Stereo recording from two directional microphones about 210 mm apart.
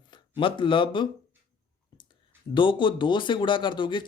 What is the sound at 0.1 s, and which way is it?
Speech, 25° left (ahead or behind).